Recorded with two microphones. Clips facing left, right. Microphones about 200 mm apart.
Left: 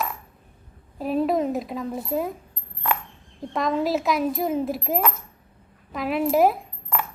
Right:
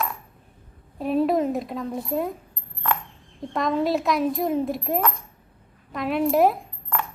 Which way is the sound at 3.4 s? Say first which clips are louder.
Even; centre (ahead or behind).